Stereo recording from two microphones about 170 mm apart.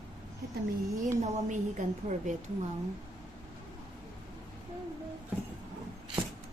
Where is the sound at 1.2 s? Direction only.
45° right (ahead or behind).